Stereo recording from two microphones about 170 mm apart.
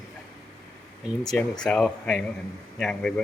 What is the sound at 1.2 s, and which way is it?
Speech, 5° left (ahead or behind).